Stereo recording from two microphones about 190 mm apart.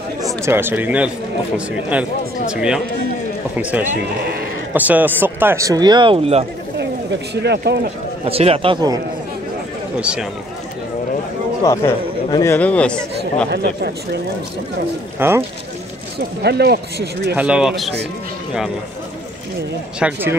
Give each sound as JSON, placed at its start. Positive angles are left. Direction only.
{"t": 0.2, "sound": "speech", "side_deg": -15}
{"t": 2.5, "sound": "speech", "side_deg": -5}
{"t": 4.7, "sound": "speech", "side_deg": -10}
{"t": 7.4, "sound": "speech", "side_deg": -60}
{"t": 8.3, "sound": "speech", "side_deg": -30}
{"t": 9.9, "sound": "speech", "side_deg": -5}
{"t": 11.6, "sound": "speech", "side_deg": 15}
{"t": 13.5, "sound": "speech", "side_deg": -60}
{"t": 15.1, "sound": "speech", "side_deg": -10}
{"t": 16.2, "sound": "speech", "side_deg": -60}
{"t": 17.4, "sound": "speech", "side_deg": -5}
{"t": 20.0, "sound": "speech", "side_deg": -10}